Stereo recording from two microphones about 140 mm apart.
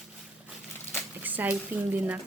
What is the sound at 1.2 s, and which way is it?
Speech, 15° right (ahead or behind).